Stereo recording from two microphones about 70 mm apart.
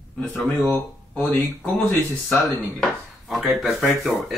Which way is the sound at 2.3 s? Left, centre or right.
Centre.